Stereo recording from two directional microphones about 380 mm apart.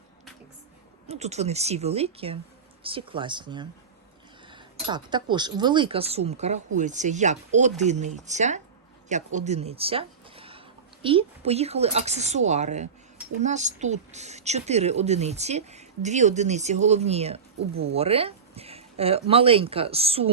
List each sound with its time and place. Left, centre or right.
1.0 s a woman's voice: centre